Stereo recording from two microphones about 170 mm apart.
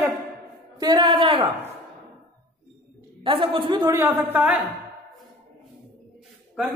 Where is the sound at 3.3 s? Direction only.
30° right (ahead or behind).